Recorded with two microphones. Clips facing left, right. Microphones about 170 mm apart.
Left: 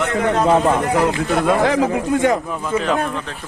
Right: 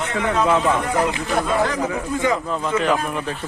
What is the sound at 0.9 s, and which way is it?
Speech, 65° left (ahead or behind).